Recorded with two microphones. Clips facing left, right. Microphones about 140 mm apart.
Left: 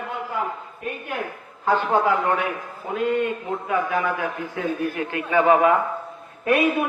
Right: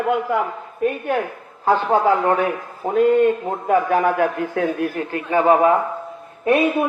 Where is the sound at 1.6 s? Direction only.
35° right (ahead or behind); by 4.9 s 60° right (ahead or behind).